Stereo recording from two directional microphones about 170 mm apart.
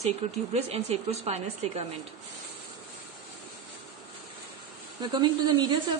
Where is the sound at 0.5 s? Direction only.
40° right (ahead or behind).